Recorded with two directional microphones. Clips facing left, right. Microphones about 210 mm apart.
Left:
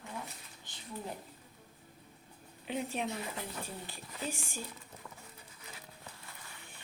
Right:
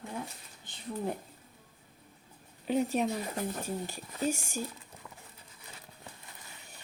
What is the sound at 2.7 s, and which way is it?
Speech, 40° right (ahead or behind).